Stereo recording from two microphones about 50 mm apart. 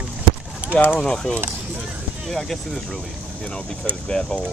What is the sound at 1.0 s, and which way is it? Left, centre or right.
Speech, centre.